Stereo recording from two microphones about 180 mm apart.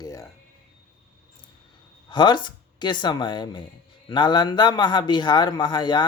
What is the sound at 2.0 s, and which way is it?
A man's voice, 25° left (ahead or behind).